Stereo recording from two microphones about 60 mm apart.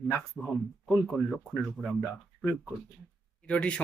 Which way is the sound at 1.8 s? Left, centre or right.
Centre.